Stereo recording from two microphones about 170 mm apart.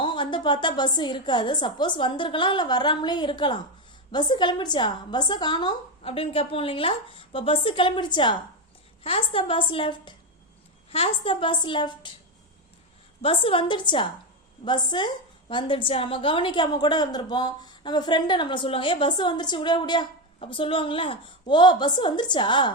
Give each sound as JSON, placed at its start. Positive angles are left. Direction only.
{"t": 0.0, "sound": "a woman's voice", "side_deg": 30}
{"t": 13.2, "sound": "a woman's voice", "side_deg": 30}